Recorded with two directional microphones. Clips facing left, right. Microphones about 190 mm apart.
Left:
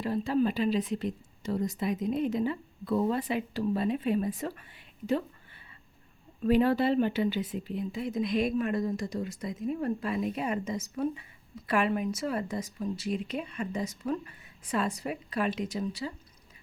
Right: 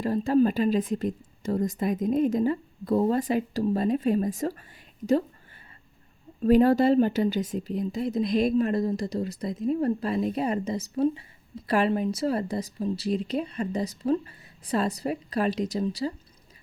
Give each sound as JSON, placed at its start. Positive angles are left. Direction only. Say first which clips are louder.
{"t": 0.0, "sound": "speech", "louder": "right 5 dB", "side_deg": -45}
{"t": 6.4, "sound": "speech", "louder": "right 5 dB", "side_deg": -40}